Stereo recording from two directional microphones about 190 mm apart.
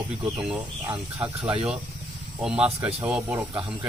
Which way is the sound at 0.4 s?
5° right (ahead or behind).